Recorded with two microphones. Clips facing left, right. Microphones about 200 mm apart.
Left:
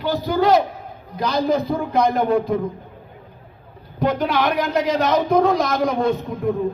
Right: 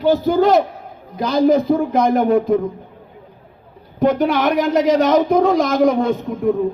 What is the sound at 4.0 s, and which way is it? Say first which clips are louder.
A man's voice: right 4 dB; 50° right (ahead or behind).